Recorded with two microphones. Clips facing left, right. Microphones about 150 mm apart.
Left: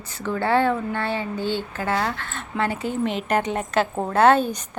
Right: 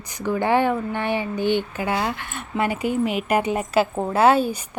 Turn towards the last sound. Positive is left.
turn(degrees=-5)  # may be behind; listen again after turning